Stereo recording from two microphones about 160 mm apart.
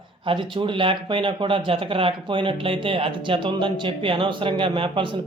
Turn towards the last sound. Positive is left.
turn(degrees=-30)  # may be behind; listen again after turning